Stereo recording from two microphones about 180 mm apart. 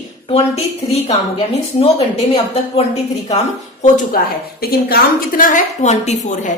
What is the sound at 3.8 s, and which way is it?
Speech, 45° left (ahead or behind).